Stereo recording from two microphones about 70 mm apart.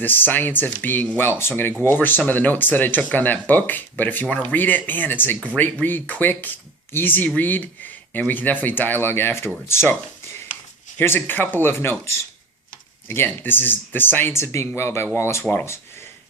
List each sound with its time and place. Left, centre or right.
0.0 s speech: left
10.9 s speech: left